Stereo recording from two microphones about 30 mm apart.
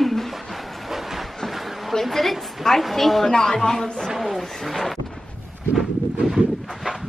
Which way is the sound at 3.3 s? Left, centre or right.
Centre.